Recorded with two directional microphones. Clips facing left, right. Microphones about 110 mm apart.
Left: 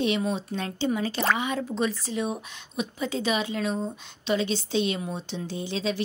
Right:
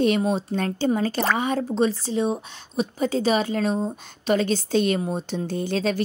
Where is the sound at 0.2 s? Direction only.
35° right (ahead or behind).